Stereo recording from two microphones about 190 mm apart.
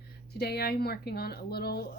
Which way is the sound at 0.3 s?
55° left (ahead or behind).